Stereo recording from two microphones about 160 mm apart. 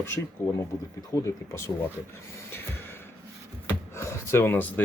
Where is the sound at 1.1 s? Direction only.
20° left (ahead or behind).